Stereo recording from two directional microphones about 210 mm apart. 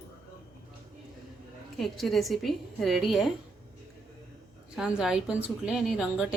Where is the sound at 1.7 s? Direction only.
Centre (ahead or behind).